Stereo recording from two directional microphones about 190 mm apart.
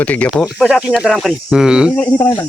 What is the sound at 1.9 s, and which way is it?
Speech, 10° left (ahead or behind).